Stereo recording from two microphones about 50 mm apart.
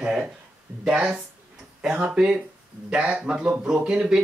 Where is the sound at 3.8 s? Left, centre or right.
Centre.